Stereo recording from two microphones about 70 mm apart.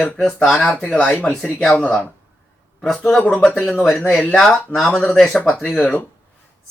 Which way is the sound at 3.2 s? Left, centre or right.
Centre.